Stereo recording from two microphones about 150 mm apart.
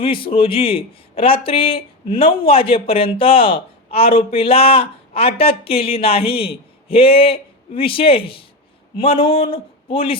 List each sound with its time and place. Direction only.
0.0 s speech: 35° left (ahead or behind)